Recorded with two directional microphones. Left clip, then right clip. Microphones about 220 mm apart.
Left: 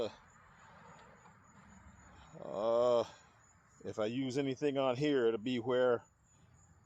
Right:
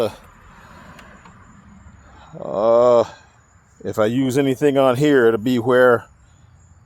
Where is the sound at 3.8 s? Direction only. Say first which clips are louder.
Right 18 dB; 40° right (ahead or behind).